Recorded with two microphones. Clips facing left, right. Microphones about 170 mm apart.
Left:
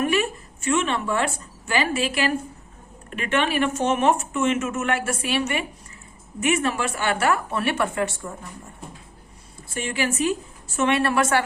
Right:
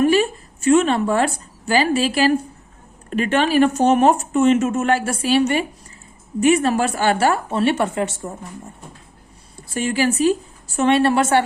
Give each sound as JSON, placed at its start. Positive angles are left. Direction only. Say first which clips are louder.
{"t": 0.0, "sound": "a woman's voice", "louder": "right 6 dB", "side_deg": -30}
{"t": 9.7, "sound": "a woman's voice", "louder": "right 6 dB", "side_deg": -35}